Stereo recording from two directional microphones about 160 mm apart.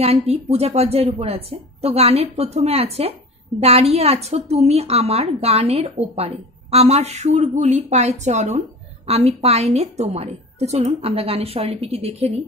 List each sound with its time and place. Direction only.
0.0 s speech: 40° right (ahead or behind)